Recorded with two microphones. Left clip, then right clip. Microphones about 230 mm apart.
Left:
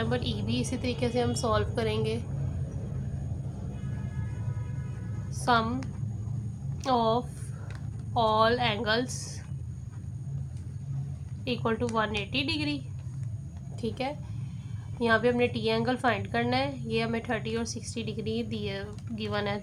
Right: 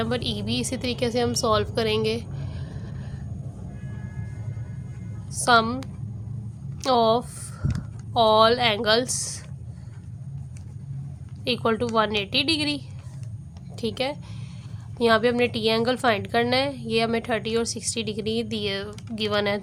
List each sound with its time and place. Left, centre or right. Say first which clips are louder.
0.0 s a woman's voice: right 4 dB; right
5.5 s a woman's voice: right 7 dB; right
6.8 s a woman's voice: right 6 dB; right
11.4 s a woman's voice: right 6 dB; right
13.8 s a woman's voice: right 6 dB; right